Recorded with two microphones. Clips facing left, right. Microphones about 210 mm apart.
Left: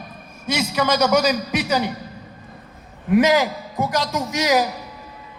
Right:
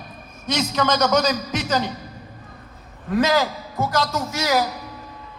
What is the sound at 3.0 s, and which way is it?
A man's voice, 15° left (ahead or behind).